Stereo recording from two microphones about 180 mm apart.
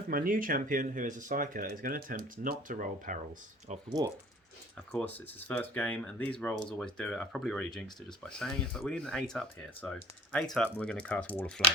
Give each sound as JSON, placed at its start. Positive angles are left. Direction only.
{"t": 0.1, "sound": "speech", "side_deg": -50}
{"t": 3.8, "sound": "speech", "side_deg": -20}
{"t": 4.9, "sound": "speech", "side_deg": 10}